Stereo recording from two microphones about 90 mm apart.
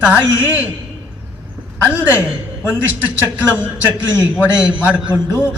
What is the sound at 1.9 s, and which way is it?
A man's voice, 20° right (ahead or behind).